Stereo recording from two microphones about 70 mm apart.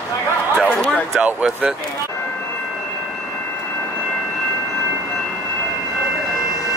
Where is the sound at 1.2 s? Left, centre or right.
Right.